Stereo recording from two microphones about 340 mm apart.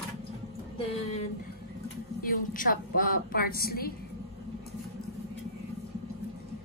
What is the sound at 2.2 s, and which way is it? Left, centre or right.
A woman's voice, left.